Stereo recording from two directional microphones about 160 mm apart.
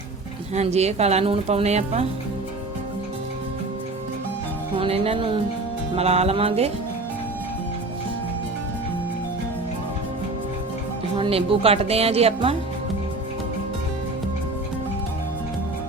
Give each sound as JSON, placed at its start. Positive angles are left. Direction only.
{"t": 0.5, "sound": "a woman's voice", "side_deg": -40}
{"t": 4.8, "sound": "speech", "side_deg": -35}
{"t": 11.2, "sound": "speech", "side_deg": -35}